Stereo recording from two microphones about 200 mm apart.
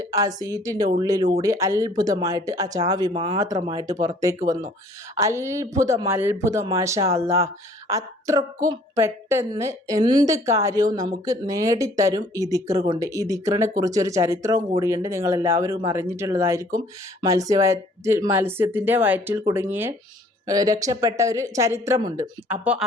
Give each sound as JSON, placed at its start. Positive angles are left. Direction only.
{"t": 0.0, "sound": "a woman's voice", "side_deg": -15}
{"t": 3.1, "sound": "speech", "side_deg": -30}
{"t": 3.4, "sound": "a woman's voice", "side_deg": -15}